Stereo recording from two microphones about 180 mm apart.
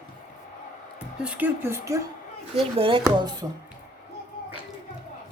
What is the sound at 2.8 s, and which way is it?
Speech, 30° right (ahead or behind).